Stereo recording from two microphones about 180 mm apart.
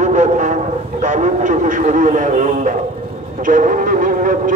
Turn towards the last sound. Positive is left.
turn(degrees=-50)  # may be behind; listen again after turning